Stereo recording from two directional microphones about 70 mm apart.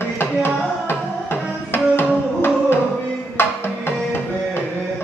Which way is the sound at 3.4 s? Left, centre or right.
Left.